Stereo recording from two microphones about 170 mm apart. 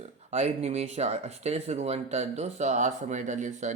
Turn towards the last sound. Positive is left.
turn(degrees=-45)  # may be behind; listen again after turning